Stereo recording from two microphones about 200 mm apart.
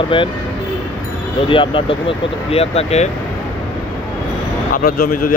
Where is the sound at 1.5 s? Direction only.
25° left (ahead or behind).